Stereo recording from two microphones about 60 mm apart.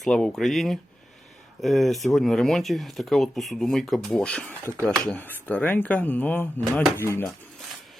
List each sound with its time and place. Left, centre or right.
0.0 s speech: centre
4.2 s speech: centre
5.1 s speech: left
6.9 s speech: left